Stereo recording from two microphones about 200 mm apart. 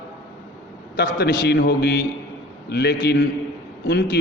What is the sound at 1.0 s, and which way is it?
A man's voice, 55° left (ahead or behind).